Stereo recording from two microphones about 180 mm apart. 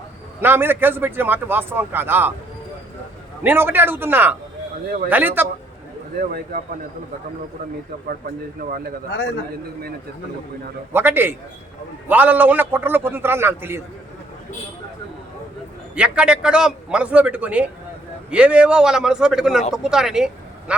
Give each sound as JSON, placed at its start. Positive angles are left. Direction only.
{"t": 0.4, "sound": "a man's voice", "side_deg": -10}
{"t": 3.4, "sound": "a man's voice", "side_deg": -10}
{"t": 6.1, "sound": "speech", "side_deg": -55}
{"t": 10.9, "sound": "a man's voice", "side_deg": -10}
{"t": 16.0, "sound": "a man's voice", "side_deg": -5}